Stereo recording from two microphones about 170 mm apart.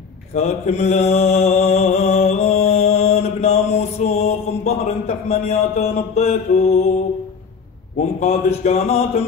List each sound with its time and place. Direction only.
0.3 s mantra: 40° left (ahead or behind)
8.2 s speech: 40° left (ahead or behind)